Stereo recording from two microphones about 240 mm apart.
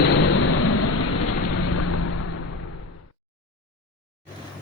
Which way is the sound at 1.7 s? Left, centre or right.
Left.